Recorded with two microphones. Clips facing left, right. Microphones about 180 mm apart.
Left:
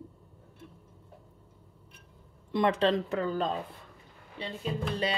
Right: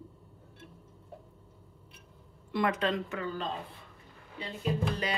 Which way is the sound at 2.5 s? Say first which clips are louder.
Left 4 dB; 25° left (ahead or behind).